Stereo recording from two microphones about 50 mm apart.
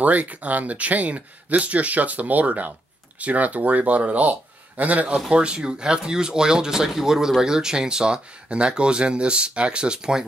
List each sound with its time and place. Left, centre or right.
0.0 s speech: right